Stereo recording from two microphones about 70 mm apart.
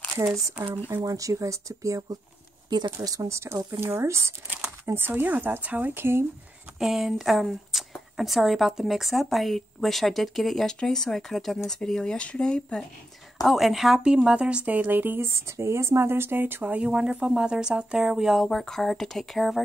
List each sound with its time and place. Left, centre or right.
0.3 s speech: right
6.8 s speech: centre
13.4 s a woman's voice: centre; by 15.2 s right
15.2 s speech: right; by 19.6 s centre